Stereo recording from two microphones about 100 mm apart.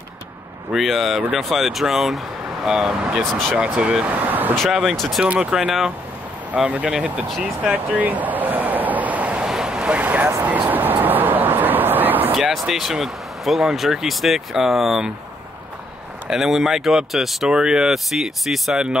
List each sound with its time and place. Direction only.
0.7 s speech: centre (ahead or behind)
3.5 s speech: 10° right (ahead or behind)
4.6 s speech: 5° right (ahead or behind)
5.2 s speech: 10° right (ahead or behind)
7.7 s waves: 15° right (ahead or behind)
10.4 s a sound: 15° right (ahead or behind)
12.4 s speech: 5° right (ahead or behind)
16.3 s speech: 5° right (ahead or behind)